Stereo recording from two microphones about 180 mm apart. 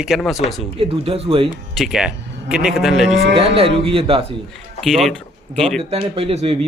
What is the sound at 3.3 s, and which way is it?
Speech, 30° right (ahead or behind).